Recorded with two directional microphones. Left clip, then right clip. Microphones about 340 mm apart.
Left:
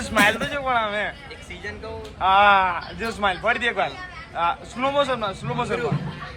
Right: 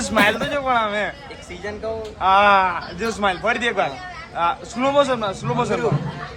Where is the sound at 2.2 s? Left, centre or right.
Centre.